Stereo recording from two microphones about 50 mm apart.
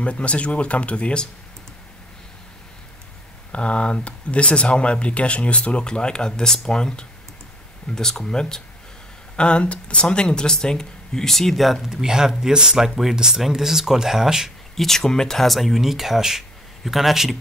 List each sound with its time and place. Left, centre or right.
0.0 s speech: left
3.5 s speech: left; by 14.5 s centre
14.8 s speech: centre